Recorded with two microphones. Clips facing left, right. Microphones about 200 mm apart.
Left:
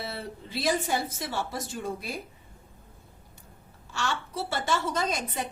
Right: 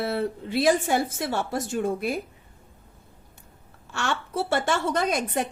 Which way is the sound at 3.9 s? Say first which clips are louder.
Right 3 dB; 60° right (ahead or behind).